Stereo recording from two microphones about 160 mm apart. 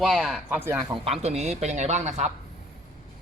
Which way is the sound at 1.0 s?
40° right (ahead or behind).